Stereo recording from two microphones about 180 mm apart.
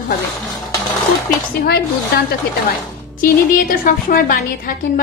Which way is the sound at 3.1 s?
50° left (ahead or behind).